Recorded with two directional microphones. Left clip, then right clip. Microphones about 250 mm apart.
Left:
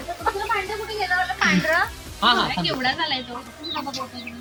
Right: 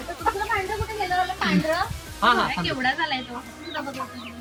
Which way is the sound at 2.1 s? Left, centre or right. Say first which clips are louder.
Left 1 dB; centre.